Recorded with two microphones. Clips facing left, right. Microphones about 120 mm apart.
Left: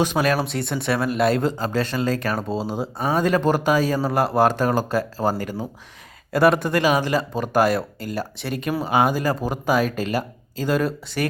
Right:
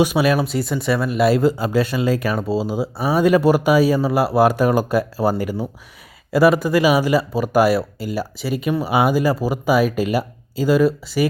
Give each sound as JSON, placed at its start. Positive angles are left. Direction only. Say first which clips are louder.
{"t": 0.0, "sound": "speech", "louder": "right 4 dB", "side_deg": -5}
{"t": 6.3, "sound": "speech", "louder": "right 3 dB", "side_deg": -5}